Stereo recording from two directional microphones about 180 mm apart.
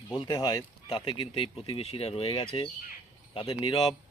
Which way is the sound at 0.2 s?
20° left (ahead or behind).